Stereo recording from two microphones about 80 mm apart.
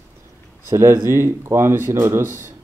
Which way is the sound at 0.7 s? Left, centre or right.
Right.